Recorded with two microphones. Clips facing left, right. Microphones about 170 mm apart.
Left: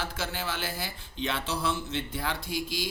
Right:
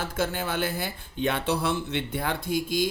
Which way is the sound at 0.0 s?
50° right (ahead or behind).